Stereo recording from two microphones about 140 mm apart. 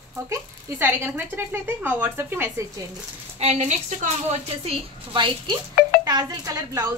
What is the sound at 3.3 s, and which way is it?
Speech, 55° right (ahead or behind).